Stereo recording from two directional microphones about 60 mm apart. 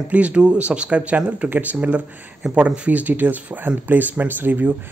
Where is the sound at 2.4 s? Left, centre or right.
Centre.